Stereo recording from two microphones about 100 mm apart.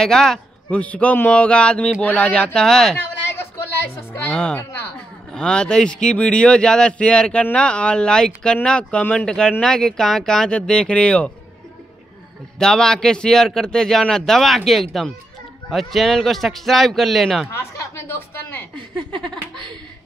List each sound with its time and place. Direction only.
0.0 s speech: 5° left (ahead or behind)
3.3 s a sound: 25° left (ahead or behind)
4.3 s speech: 10° left (ahead or behind)
12.5 s a man's voice: 5° left (ahead or behind)
17.7 s a woman's voice: 25° left (ahead or behind)
18.8 s speech: 60° right (ahead or behind)